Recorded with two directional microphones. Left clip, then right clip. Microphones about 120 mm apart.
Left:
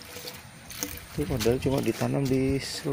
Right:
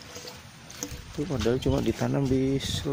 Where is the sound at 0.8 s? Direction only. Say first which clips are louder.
Left 2 dB; 90° left.